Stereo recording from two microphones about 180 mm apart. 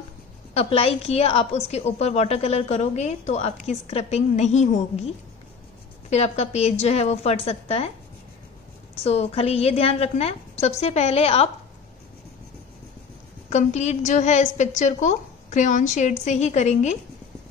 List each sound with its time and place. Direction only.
0.6 s a woman's voice: 35° left (ahead or behind)
9.0 s a woman's voice: 35° left (ahead or behind)
13.5 s a woman's voice: 40° left (ahead or behind)